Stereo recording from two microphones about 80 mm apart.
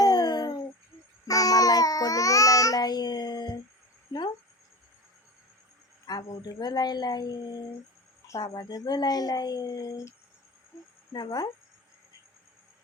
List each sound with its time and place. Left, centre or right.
0.0 s a sound: left
1.3 s babbling: left
6.1 s a woman's voice: left
11.1 s a woman's voice: left